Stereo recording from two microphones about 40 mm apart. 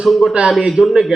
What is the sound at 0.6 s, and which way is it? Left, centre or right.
Speech, centre.